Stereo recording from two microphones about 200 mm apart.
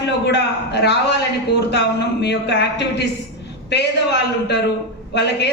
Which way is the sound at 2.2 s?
55° left (ahead or behind).